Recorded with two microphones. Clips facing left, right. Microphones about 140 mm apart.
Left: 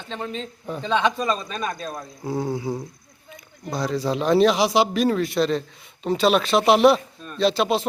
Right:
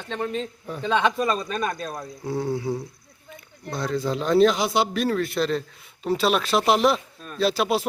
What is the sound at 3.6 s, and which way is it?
A man's voice, 5° left (ahead or behind).